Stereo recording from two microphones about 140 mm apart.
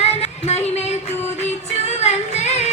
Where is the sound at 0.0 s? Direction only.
50° left (ahead or behind).